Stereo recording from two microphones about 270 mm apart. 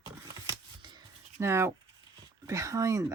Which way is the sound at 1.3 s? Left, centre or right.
Centre.